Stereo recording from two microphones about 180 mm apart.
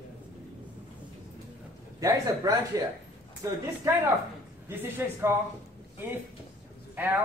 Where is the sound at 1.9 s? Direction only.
20° right (ahead or behind).